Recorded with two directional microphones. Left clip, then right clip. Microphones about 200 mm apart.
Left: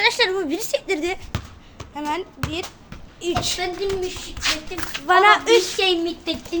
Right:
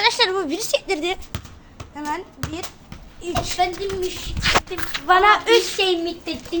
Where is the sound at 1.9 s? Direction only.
25° left (ahead or behind).